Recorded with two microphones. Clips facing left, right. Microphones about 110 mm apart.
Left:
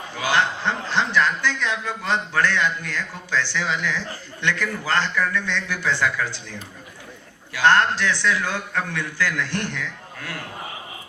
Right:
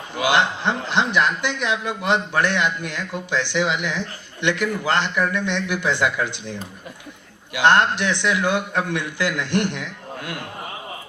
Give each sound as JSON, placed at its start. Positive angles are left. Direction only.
{"t": 0.2, "sound": "a man's voice", "side_deg": -15}